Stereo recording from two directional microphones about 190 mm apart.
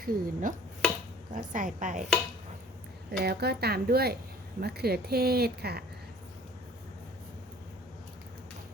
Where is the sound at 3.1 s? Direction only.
60° right (ahead or behind).